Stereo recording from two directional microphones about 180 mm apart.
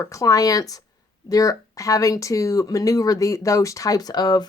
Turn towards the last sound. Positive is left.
turn(degrees=20)  # may be behind; listen again after turning